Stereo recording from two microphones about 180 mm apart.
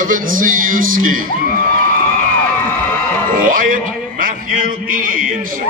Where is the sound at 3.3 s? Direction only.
50° right (ahead or behind).